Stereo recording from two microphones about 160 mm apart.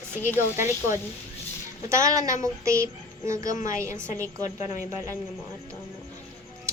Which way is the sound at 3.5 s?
55° left (ahead or behind).